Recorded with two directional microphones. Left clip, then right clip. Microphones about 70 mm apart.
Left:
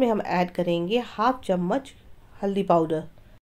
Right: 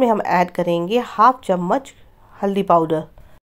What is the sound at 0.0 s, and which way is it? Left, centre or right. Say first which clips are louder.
A woman's voice: right 7 dB; right.